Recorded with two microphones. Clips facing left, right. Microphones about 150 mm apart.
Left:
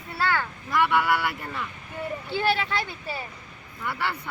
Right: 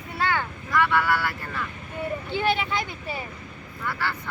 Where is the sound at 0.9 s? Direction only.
20° left (ahead or behind).